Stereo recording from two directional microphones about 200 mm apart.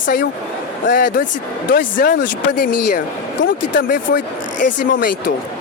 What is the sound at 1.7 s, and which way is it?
Speech, 45° left (ahead or behind).